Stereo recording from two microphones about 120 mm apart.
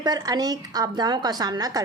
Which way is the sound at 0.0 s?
35° right (ahead or behind).